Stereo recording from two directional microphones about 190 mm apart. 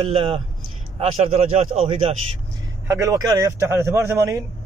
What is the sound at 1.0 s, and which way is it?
Speech, 35° right (ahead or behind).